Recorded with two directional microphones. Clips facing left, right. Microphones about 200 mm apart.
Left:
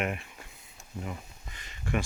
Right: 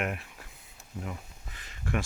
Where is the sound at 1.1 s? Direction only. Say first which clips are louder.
Left 1 dB; centre (ahead or behind).